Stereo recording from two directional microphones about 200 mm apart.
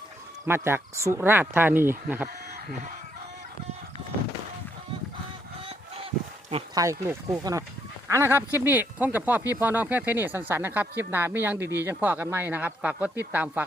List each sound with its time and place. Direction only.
0.4 s speech: 10° right (ahead or behind)
6.7 s speech: 15° right (ahead or behind)